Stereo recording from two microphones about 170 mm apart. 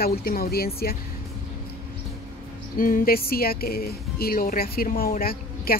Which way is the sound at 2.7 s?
55° left (ahead or behind).